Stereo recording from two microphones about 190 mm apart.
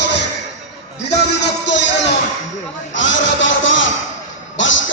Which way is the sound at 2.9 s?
80° left.